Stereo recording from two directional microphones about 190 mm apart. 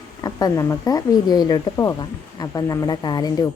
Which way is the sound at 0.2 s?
20° left (ahead or behind).